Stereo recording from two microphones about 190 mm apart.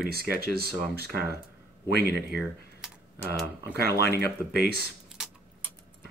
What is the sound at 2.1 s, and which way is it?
Speech, 55° right (ahead or behind).